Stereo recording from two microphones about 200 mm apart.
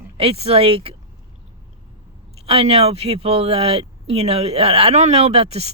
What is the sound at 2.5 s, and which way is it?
Speech, 30° right (ahead or behind).